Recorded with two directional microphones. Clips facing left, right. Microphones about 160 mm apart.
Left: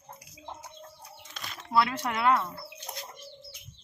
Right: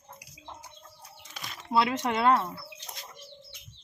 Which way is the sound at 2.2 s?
30° right (ahead or behind).